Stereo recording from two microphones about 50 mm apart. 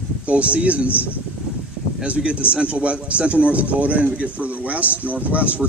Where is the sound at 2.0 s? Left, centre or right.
Right.